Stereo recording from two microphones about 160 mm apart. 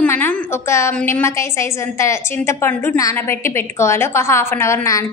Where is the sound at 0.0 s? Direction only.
10° left (ahead or behind).